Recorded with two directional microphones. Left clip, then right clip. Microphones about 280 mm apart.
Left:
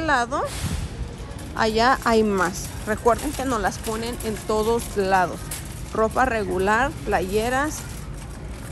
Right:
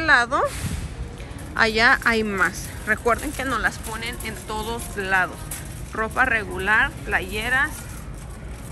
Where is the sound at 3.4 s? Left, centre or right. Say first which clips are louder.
Even; centre.